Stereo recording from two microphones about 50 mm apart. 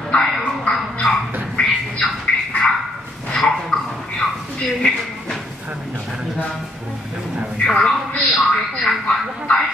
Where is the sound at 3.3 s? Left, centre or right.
Centre.